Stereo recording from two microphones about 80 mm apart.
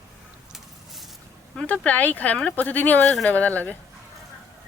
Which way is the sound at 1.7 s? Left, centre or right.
Centre.